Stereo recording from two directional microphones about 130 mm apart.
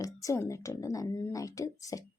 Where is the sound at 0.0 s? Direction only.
25° left (ahead or behind).